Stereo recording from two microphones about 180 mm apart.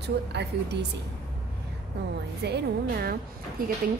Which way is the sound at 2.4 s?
65° right (ahead or behind).